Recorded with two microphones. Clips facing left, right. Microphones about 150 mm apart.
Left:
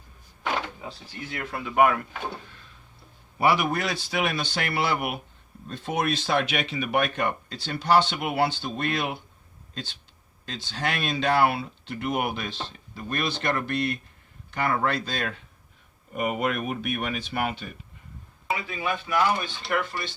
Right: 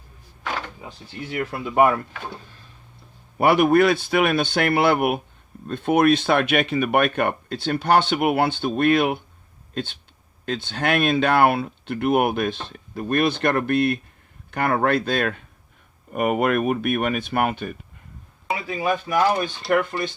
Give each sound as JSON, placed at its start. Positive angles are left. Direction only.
{"t": 1.6, "sound": "speech", "side_deg": -30}
{"t": 3.3, "sound": "speech", "side_deg": -55}
{"t": 18.5, "sound": "speech", "side_deg": -40}